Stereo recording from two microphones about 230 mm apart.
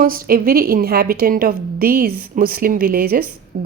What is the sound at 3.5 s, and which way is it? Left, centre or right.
Music, right.